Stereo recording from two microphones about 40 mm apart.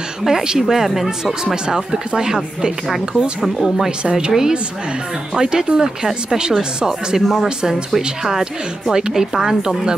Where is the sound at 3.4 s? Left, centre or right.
Centre.